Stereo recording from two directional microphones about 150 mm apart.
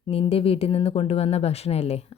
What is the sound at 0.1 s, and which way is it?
Speech, 40° left (ahead or behind).